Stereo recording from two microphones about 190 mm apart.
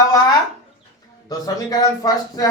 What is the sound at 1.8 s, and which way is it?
Speech, 20° left (ahead or behind).